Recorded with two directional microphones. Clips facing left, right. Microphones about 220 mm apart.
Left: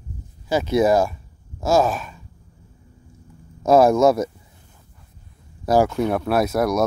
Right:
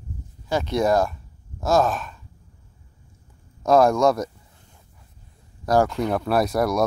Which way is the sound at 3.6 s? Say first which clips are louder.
Left 3 dB; 5° left (ahead or behind).